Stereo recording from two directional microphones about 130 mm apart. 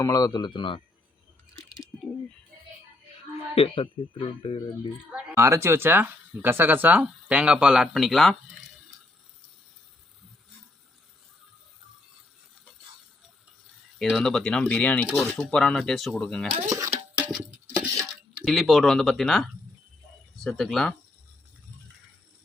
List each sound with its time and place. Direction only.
0.0 s speech: 30° left (ahead or behind)
3.5 s speech: 45° left (ahead or behind)
5.4 s speech: 20° right (ahead or behind); by 8.4 s centre (ahead or behind)
14.0 s speech: 5° left (ahead or behind)
16.6 s music: 25° right (ahead or behind)
17.2 s a sound: 10° right (ahead or behind)
18.3 s speech: centre (ahead or behind)